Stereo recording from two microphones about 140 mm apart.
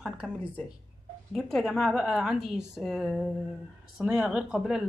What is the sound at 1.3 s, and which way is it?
A woman's voice, centre (ahead or behind).